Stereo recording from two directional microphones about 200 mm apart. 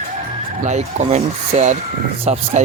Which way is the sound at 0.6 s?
35° right (ahead or behind).